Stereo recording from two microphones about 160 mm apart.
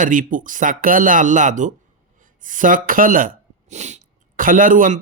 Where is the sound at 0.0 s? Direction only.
55° right (ahead or behind).